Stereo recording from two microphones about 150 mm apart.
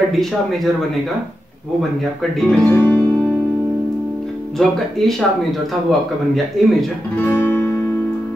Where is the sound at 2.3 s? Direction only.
5° left (ahead or behind).